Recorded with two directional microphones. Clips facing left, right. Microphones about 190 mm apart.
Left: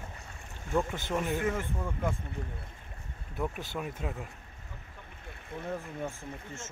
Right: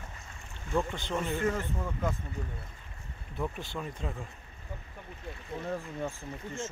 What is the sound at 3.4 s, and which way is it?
Speech, 5° left (ahead or behind).